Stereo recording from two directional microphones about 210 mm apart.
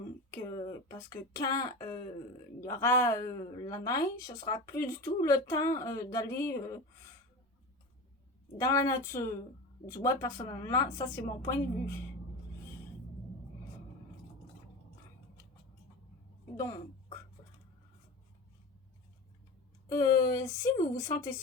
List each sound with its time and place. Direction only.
0.3 s speech: 15° left (ahead or behind)
8.5 s speech: 15° left (ahead or behind)
19.9 s speech: 15° left (ahead or behind)